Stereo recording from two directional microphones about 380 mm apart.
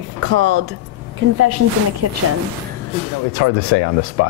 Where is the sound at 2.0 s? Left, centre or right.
Right.